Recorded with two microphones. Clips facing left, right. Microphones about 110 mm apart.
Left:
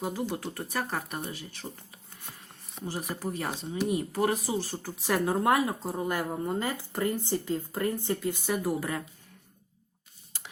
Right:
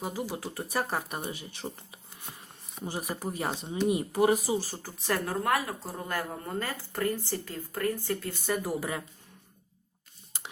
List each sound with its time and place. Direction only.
0.0 s speech: 5° right (ahead or behind)
2.8 s speech: 15° right (ahead or behind)
5.0 s speech: 15° left (ahead or behind)
8.4 s speech: 5° left (ahead or behind)